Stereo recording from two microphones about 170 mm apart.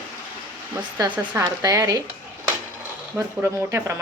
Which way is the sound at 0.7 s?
20° right (ahead or behind).